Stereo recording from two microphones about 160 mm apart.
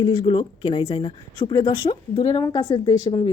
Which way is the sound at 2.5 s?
25° left (ahead or behind).